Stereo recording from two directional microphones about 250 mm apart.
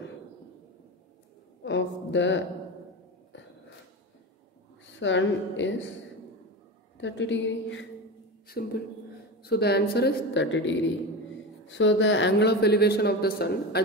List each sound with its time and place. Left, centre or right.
1.6 s speech: left
4.9 s speech: left
7.0 s a woman's voice: left